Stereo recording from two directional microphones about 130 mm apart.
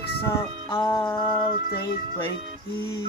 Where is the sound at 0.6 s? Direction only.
35° left (ahead or behind).